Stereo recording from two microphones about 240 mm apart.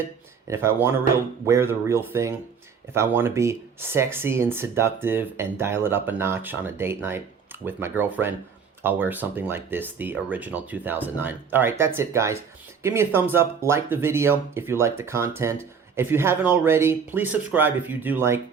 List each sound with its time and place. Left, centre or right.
0.4 s speech: centre